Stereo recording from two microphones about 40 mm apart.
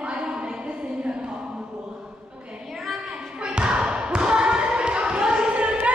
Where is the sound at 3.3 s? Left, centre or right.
Right.